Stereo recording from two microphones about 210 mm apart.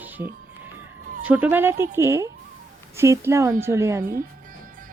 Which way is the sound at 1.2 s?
5° right (ahead or behind).